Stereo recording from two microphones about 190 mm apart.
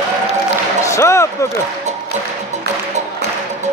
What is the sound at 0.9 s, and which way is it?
Basketball bounce, 15° left (ahead or behind).